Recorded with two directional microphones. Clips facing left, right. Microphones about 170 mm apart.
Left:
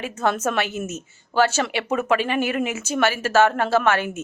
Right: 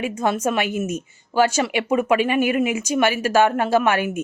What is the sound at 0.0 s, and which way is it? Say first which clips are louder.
Speech: right 2 dB; 10° right (ahead or behind).